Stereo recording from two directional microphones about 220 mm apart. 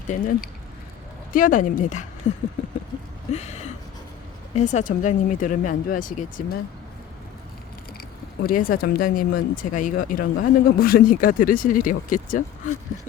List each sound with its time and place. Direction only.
0.1 s speech: 35° left (ahead or behind)
8.4 s speech: 40° left (ahead or behind)